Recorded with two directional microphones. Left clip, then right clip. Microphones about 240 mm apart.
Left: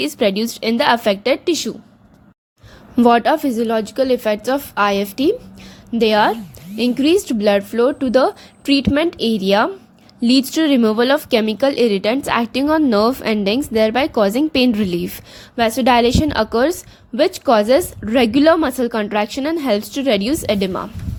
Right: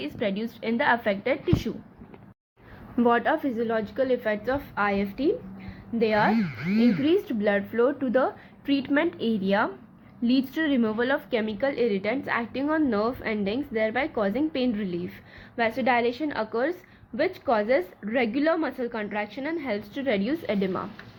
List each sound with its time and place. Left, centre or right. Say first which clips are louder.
0.0 s a woman's voice: left 12 dB; left
2.9 s a woman's voice: left 10 dB; left